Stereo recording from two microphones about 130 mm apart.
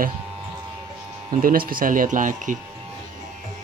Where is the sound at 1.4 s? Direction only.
90° right.